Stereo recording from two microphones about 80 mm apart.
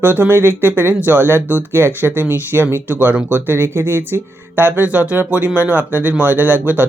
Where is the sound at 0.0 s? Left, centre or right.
Right.